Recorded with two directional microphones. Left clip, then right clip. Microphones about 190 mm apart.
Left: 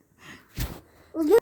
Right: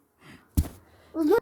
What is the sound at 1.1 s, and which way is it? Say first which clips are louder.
Speech: even; 20° right (ahead or behind).